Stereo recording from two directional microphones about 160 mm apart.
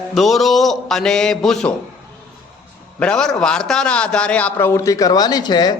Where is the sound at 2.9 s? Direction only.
5° left (ahead or behind).